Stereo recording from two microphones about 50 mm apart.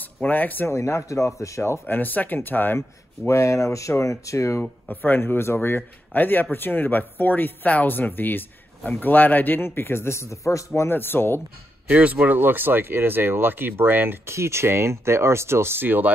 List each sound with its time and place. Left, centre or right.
0.3 s speech: left
0.7 s speech: left
1.9 s speech: left
3.3 s speech: left
4.8 s a man's voice: left
10.9 s a man's voice: left
11.9 s speech: right
12.4 s speech: right